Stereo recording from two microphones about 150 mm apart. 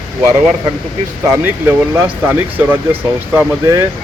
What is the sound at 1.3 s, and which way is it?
A man's voice, 15° right (ahead or behind).